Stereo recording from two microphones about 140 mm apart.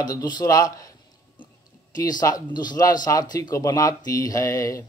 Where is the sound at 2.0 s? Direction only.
25° left (ahead or behind).